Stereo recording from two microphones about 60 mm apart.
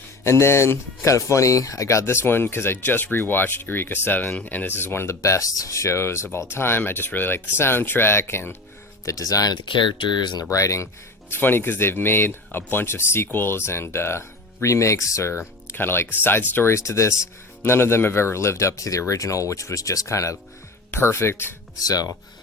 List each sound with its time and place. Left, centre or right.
0.3 s speech: left
9.0 s speech: left
10.5 s speech: left
11.3 s speech: left
15.3 s speech: left
16.7 s speech: left
17.6 s speech: left
20.9 s speech: left
21.8 s speech: left